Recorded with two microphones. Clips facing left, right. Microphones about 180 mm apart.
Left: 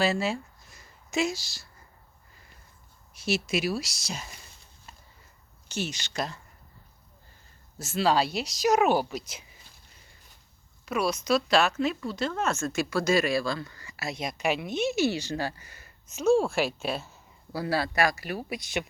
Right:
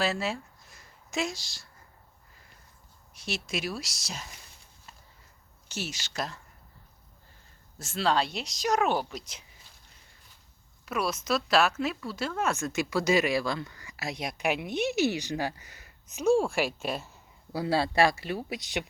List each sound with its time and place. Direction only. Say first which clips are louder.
0.0 s a sound: left 3 dB; centre (ahead or behind)
3.2 s speech: left 6 dB; 5° left (ahead or behind)
5.6 s speech: left 4 dB; 5° right (ahead or behind)
7.8 s speech: left 3 dB; centre (ahead or behind)
10.8 s a woman's voice: left 3 dB; centre (ahead or behind); by 18.8 s 20° right (ahead or behind)